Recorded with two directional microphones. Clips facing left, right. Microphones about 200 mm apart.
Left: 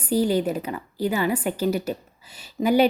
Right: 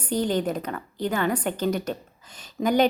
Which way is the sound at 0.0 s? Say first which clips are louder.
Left 3 dB; 10° left (ahead or behind).